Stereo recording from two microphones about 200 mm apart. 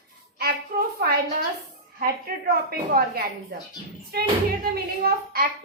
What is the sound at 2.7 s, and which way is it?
Speech, 50° right (ahead or behind).